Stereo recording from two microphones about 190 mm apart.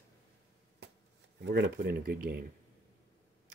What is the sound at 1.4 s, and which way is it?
Speech, 65° right (ahead or behind).